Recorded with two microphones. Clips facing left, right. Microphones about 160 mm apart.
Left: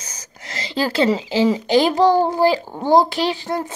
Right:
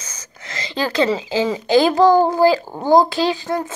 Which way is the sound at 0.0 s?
35° left (ahead or behind).